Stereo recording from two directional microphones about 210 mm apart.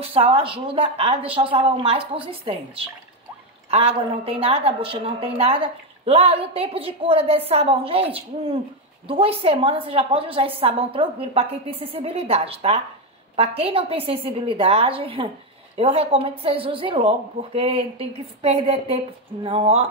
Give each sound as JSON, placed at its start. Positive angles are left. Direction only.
{"t": 0.0, "sound": "a woman's voice", "side_deg": -25}